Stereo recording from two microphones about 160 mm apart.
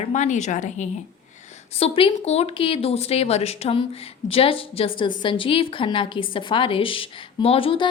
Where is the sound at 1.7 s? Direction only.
35° left (ahead or behind).